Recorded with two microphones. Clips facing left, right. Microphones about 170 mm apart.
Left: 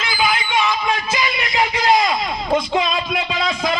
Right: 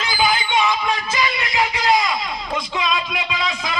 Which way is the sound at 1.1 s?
25° left (ahead or behind).